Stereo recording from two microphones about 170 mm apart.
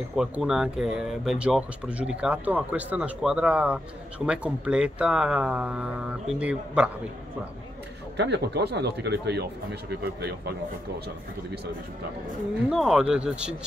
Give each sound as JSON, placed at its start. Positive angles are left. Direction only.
{"t": 0.1, "sound": "speech", "side_deg": -5}
{"t": 8.2, "sound": "speech", "side_deg": -85}
{"t": 12.6, "sound": "speech", "side_deg": -5}